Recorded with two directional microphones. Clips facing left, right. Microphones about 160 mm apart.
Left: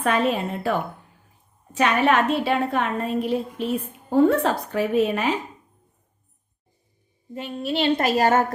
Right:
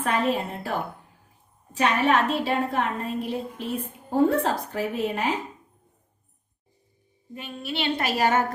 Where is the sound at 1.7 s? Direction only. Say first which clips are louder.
Left 2 dB; 75° left (ahead or behind).